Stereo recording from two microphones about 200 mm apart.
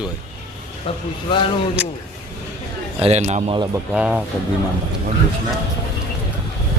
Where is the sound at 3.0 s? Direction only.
30° right (ahead or behind).